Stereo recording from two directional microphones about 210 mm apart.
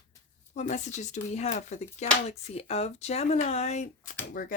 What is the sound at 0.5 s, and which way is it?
Speech, 35° left (ahead or behind).